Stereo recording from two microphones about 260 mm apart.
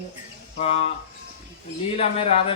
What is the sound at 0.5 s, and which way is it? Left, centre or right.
Speech, left.